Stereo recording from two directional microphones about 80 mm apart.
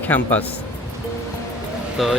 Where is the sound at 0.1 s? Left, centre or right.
Centre.